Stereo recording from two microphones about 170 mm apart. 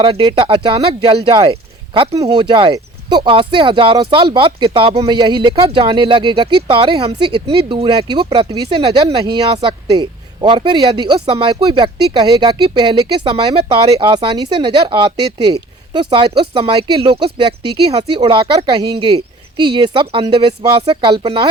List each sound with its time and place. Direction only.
0.0 s speech: 30° right (ahead or behind)